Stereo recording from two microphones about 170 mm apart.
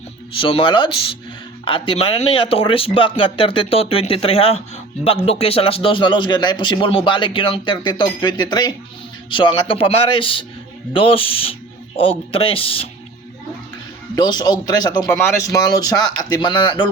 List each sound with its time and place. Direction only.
0.3 s speech: 30° left (ahead or behind)
14.2 s speech: 25° left (ahead or behind)